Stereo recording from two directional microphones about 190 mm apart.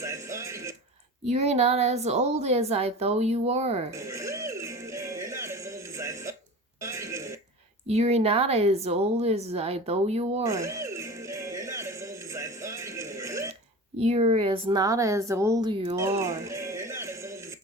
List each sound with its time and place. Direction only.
0.0 s music: 15° right (ahead or behind)
1.2 s a woman's voice: 35° right (ahead or behind)
3.9 s music: 15° right (ahead or behind)
6.8 s throat clearing: 15° right (ahead or behind)
7.9 s a woman's voice: 35° right (ahead or behind)
10.4 s music: 15° right (ahead or behind)
14.0 s a woman's voice: 35° right (ahead or behind)
16.0 s music: 15° right (ahead or behind)